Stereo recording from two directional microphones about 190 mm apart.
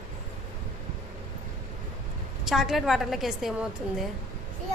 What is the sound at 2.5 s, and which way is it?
A woman's voice, centre (ahead or behind).